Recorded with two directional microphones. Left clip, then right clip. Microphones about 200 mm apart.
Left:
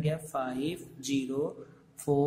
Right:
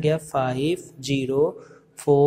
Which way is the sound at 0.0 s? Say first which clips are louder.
Right 11 dB; 15° right (ahead or behind).